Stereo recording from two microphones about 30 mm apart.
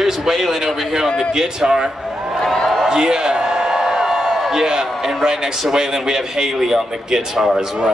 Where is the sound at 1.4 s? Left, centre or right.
Right.